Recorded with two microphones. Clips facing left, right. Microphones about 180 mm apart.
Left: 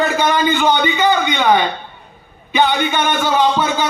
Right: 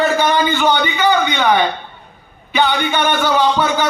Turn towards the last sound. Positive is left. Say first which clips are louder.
# even
turn(degrees=20)  # may be behind; listen again after turning